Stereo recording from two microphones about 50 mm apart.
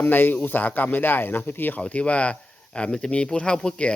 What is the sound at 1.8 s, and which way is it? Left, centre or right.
Speech, left.